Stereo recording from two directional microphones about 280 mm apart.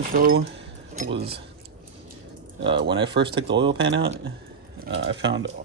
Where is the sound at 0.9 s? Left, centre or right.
Right.